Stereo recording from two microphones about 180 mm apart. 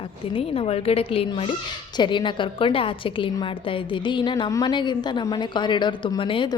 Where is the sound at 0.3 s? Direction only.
30° left (ahead or behind).